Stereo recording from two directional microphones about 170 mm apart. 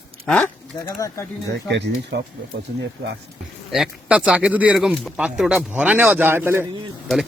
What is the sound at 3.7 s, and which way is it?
Speech, 5° right (ahead or behind).